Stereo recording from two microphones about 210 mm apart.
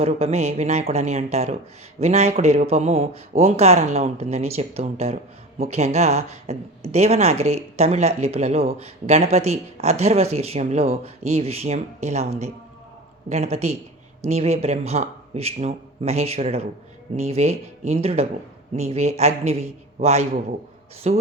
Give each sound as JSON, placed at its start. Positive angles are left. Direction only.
{"t": 0.0, "sound": "speech", "side_deg": -30}